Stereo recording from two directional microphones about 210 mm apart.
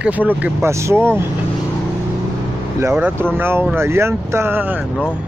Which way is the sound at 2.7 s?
10° right (ahead or behind).